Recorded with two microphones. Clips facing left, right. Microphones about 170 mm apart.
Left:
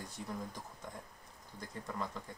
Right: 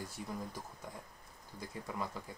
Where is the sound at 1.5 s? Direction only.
10° right (ahead or behind).